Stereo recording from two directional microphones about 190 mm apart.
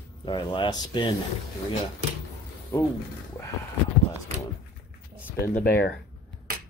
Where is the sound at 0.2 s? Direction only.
25° left (ahead or behind).